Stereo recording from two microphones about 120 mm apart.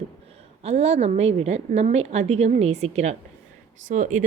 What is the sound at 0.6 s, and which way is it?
A woman's voice, 60° right (ahead or behind).